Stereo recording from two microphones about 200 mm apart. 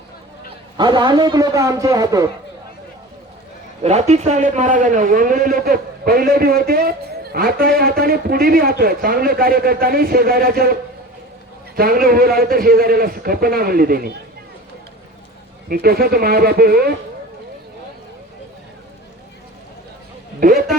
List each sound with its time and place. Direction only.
0.8 s a man's voice: 20° right (ahead or behind)
3.8 s a man's voice: 35° right (ahead or behind); by 10.8 s 50° right (ahead or behind)
11.8 s a man's voice: 45° right (ahead or behind)
15.7 s a man's voice: 50° right (ahead or behind)
20.4 s a man's voice: 45° right (ahead or behind)